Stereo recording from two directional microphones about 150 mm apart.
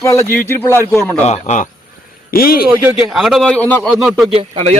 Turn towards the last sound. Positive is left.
turn(degrees=-45)  # may be behind; listen again after turning